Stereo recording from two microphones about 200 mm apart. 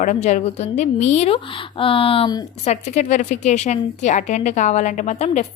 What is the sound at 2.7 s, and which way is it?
A woman's voice, 35° left (ahead or behind).